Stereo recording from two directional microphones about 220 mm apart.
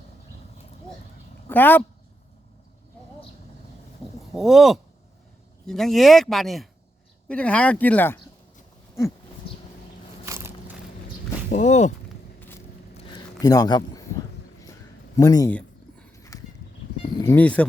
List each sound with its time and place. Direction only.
1.5 s speech: 10° left (ahead or behind)
4.3 s speech: centre (ahead or behind)
10.2 s crushing: 15° right (ahead or behind)
11.4 s speech: 35° left (ahead or behind)
12.4 s vehicle: 10° left (ahead or behind)
12.9 s a sound: 25° left (ahead or behind)
15.1 s speech: 15° left (ahead or behind)
15.5 s a sound: 10° left (ahead or behind)
17.2 s speech: 5° left (ahead or behind)